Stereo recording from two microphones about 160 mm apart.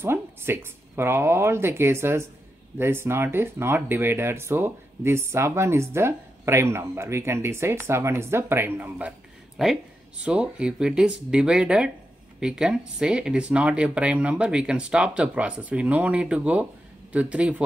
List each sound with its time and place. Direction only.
0.0 s speech: 15° right (ahead or behind)